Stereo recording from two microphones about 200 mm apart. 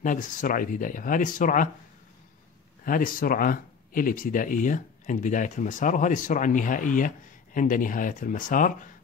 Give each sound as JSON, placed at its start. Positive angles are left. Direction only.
{"t": 0.0, "sound": "speech", "side_deg": 40}
{"t": 2.8, "sound": "speech", "side_deg": 45}